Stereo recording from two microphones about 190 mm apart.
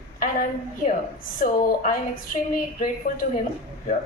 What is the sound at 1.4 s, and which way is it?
A woman's voice, 45° left (ahead or behind).